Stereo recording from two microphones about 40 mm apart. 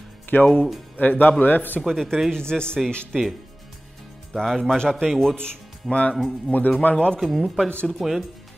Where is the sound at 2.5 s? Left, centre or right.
Left.